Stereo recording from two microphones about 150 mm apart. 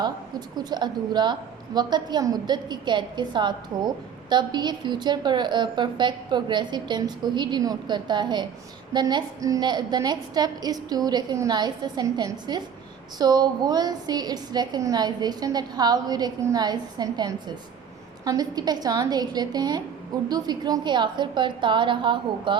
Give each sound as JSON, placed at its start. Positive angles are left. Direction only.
{"t": 0.0, "sound": "a woman's voice", "side_deg": -25}